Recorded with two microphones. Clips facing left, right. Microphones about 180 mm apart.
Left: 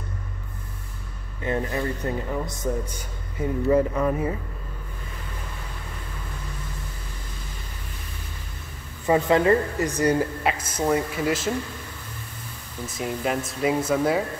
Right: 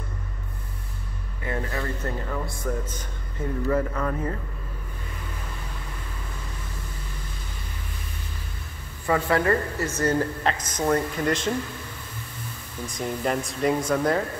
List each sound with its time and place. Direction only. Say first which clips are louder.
1.4 s speech: left 4 dB; 20° left (ahead or behind)
9.0 s speech: left 3 dB; 20° left (ahead or behind)
12.8 s speech: even; 5° left (ahead or behind)